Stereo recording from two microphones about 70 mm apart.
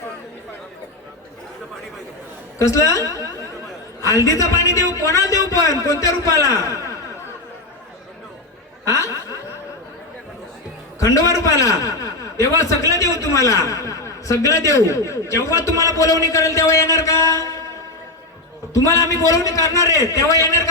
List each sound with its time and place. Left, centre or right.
2.6 s a man's voice: left
8.9 s snicker: left
11.0 s a man's voice: left
18.7 s a man's voice: left